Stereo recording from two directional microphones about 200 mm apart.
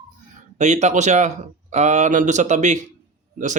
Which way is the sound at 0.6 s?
35° right (ahead or behind).